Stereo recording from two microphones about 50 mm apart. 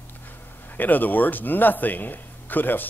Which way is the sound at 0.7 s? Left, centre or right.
Left.